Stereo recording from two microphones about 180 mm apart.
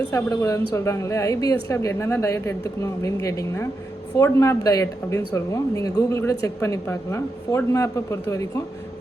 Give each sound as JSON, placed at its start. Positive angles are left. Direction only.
{"t": 0.1, "sound": "speech", "side_deg": 20}